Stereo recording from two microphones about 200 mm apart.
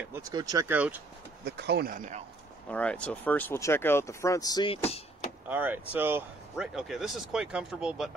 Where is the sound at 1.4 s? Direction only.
55° right (ahead or behind); by 2.2 s 40° right (ahead or behind).